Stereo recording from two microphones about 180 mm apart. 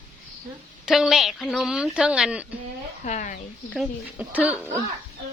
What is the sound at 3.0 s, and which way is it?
Speech, 45° left (ahead or behind).